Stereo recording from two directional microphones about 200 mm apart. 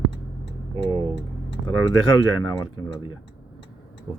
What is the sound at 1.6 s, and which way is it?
Speech, 20° left (ahead or behind).